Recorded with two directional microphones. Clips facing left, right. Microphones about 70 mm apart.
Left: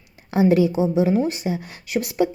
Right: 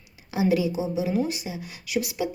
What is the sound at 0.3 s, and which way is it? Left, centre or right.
A woman's voice, left.